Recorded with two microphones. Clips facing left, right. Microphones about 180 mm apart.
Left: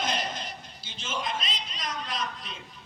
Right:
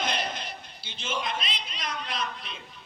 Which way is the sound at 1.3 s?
45° left (ahead or behind).